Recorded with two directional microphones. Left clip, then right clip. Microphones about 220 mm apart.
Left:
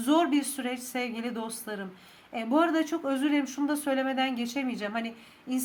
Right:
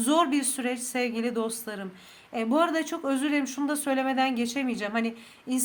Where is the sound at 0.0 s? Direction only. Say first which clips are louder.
Right 1 dB; 25° right (ahead or behind).